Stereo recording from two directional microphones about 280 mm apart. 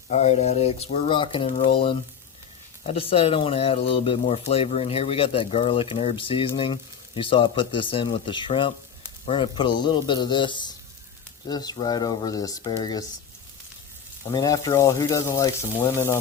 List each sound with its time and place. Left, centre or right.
0.1 s speech: left
14.3 s speech: centre